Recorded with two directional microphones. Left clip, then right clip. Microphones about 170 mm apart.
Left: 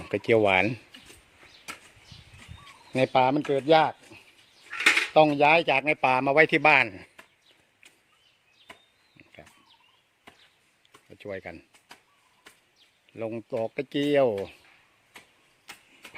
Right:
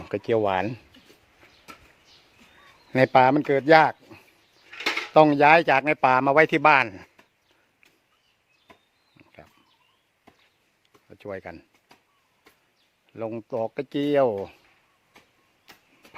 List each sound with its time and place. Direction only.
0.0 s a sound: centre (ahead or behind)
0.3 s speech: 15° left (ahead or behind)
2.9 s speech: 30° right (ahead or behind)
4.7 s cutlery: 50° left (ahead or behind)
5.1 s a man's voice: 35° right (ahead or behind); by 7.3 s 5° right (ahead or behind)
9.1 s a sound: centre (ahead or behind)
13.1 s speech: 5° right (ahead or behind)
15.7 s vehicle: 5° right (ahead or behind)